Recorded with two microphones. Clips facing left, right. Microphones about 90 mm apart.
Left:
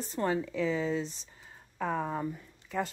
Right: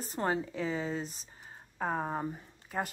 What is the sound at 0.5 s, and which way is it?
Speech, 40° right (ahead or behind).